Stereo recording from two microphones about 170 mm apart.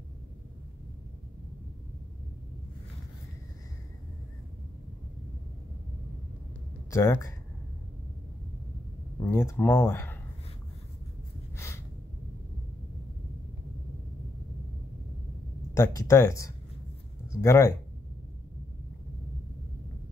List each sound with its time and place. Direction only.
6.9 s speech: 15° left (ahead or behind)
9.2 s speech: 15° left (ahead or behind)
11.5 s gasp: 15° left (ahead or behind)
15.7 s a sound: 20° left (ahead or behind)
16.1 s speech: 20° left (ahead or behind)